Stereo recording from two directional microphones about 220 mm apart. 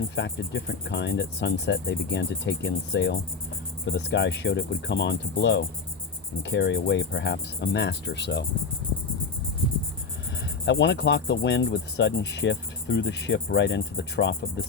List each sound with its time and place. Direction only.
0.2 s speech: 50° left (ahead or behind)
10.7 s speech: 55° left (ahead or behind)